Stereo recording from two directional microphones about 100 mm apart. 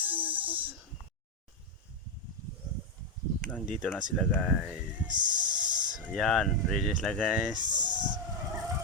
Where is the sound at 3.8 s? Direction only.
10° right (ahead or behind).